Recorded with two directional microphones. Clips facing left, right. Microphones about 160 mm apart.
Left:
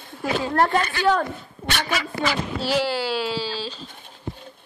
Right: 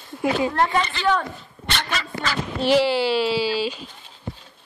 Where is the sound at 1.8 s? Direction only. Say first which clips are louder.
Left 3 dB; 10° left (ahead or behind).